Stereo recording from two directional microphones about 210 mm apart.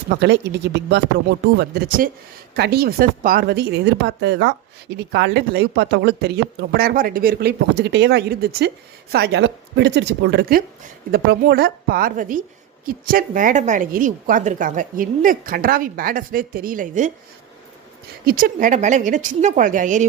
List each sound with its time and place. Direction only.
0.1 s a woman's voice: 55° right (ahead or behind); by 17.1 s 35° right (ahead or behind)
18.3 s a woman's voice: 45° right (ahead or behind)